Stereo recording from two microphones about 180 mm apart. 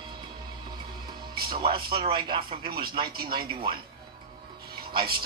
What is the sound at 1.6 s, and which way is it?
Speech, 25° right (ahead or behind).